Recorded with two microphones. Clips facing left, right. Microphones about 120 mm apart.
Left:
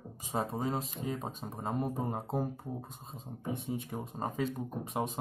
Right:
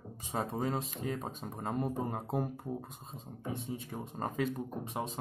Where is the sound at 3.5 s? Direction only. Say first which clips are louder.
Left 3 dB; 15° left (ahead or behind).